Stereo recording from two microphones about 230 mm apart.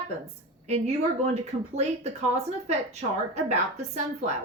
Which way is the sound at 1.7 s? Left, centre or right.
Right.